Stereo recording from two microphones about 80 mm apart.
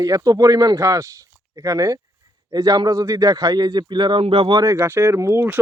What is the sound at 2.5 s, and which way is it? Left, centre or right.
A man's voice, right.